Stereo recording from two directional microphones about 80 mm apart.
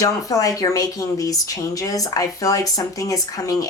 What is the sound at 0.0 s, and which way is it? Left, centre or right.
Speech, left.